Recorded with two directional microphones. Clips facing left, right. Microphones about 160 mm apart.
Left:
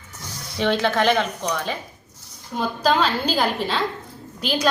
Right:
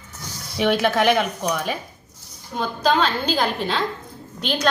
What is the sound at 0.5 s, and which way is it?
Speech, 10° right (ahead or behind).